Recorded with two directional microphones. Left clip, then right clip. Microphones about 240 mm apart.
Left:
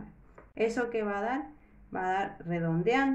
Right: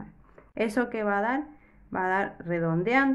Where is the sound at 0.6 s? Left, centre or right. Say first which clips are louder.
Right 2 dB; right.